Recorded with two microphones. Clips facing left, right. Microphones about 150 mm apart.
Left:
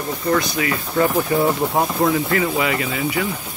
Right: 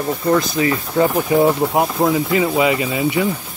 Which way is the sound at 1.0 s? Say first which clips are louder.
Right 3 dB; 15° right (ahead or behind).